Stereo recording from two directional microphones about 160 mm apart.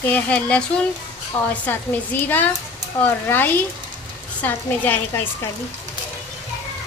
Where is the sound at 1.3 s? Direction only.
35° left (ahead or behind).